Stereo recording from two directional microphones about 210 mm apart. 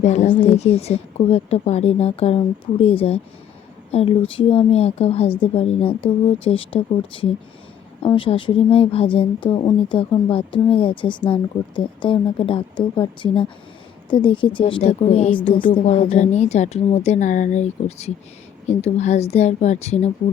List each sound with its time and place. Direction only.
0.0 s a woman's voice: 30° left (ahead or behind)